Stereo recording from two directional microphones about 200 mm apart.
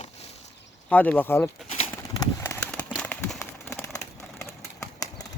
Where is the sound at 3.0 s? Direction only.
5° left (ahead or behind).